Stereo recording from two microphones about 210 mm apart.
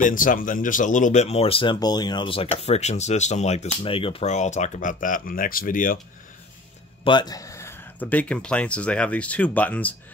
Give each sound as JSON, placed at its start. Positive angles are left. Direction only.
{"t": 0.0, "sound": "speech", "side_deg": 40}
{"t": 7.1, "sound": "speech", "side_deg": 20}